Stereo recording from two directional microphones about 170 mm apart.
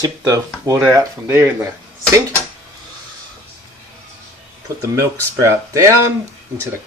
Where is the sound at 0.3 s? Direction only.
20° right (ahead or behind).